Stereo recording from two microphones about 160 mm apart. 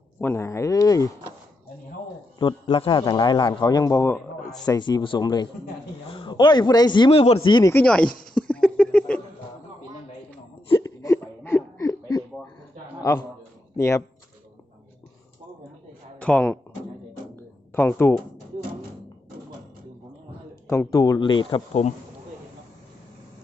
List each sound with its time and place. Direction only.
0.2 s speech: 15° left (ahead or behind)
2.4 s speech: 30° left (ahead or behind)
7.7 s speech: 10° left (ahead or behind)
8.3 s a sound: 5° left (ahead or behind)
10.7 s a sound: 25° left (ahead or behind)
13.0 s a man's voice: 20° left (ahead or behind)
16.1 s speech: 10° left (ahead or behind)
17.3 s a sound: 15° left (ahead or behind)
20.7 s speech: 20° left (ahead or behind)
21.7 s speech: 45° left (ahead or behind)